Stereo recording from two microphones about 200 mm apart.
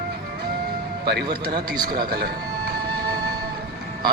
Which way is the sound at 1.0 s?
55° right (ahead or behind).